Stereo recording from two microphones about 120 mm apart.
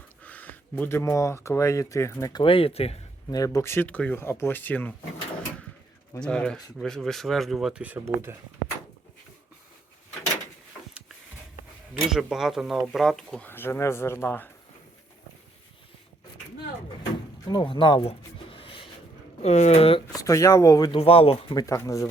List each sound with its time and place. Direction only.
0.2 s speech: 15° left (ahead or behind)
2.3 s speech: 45° left (ahead or behind)
3.2 s speech: 30° left (ahead or behind)
3.8 s speech: 10° left (ahead or behind)
6.1 s speech: 10° left (ahead or behind); by 8.4 s 20° right (ahead or behind)
12.1 s speech: 5° right (ahead or behind)
13.4 s speech: 20° left (ahead or behind)
17.5 s speech: 40° left (ahead or behind)
18.5 s a sound: 45° left (ahead or behind)
19.4 s speech: 65° left (ahead or behind)
20.1 s speech: 30° left (ahead or behind)
20.9 s speech: 50° left (ahead or behind)
21.5 s speech: 30° left (ahead or behind)